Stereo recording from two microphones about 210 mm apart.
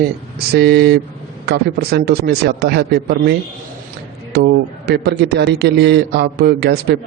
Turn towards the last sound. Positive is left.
turn(degrees=-50)  # may be behind; listen again after turning